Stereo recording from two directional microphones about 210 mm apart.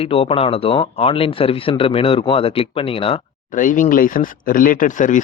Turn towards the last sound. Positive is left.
turn(degrees=35)  # may be behind; listen again after turning